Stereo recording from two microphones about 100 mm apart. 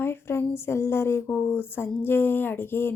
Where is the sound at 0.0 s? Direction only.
25° left (ahead or behind).